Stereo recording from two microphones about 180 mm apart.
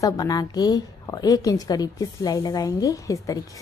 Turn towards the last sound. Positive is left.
turn(degrees=20)  # may be behind; listen again after turning